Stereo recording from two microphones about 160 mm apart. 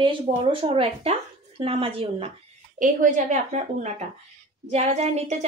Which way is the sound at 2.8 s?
55° right (ahead or behind).